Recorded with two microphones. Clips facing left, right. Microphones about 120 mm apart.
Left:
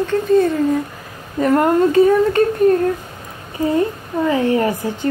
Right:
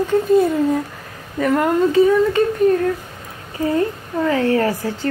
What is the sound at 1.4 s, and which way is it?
Speech, 35° left (ahead or behind).